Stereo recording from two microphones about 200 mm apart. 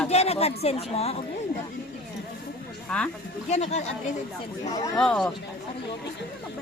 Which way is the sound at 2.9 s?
5° left (ahead or behind).